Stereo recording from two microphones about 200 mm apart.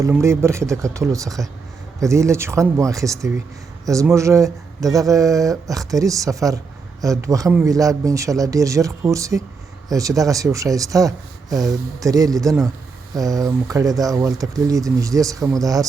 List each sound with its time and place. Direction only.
0.0 s speech: 15° right (ahead or behind)